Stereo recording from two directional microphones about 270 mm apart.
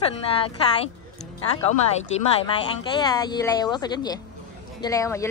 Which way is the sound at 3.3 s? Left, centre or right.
Centre.